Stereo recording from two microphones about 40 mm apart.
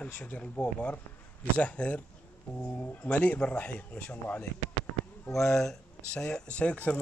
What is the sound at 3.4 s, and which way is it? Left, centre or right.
Speech, left.